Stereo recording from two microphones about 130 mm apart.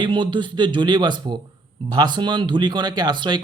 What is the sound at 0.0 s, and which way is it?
Speech, 35° right (ahead or behind).